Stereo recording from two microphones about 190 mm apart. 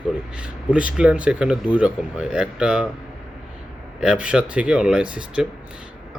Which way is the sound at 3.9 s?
5° right (ahead or behind).